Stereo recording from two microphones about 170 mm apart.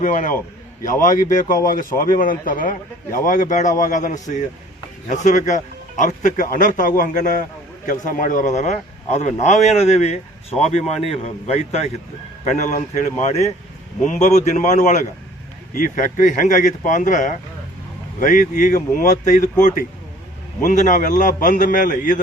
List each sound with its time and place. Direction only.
0.0 s a man's voice: 50° left (ahead or behind)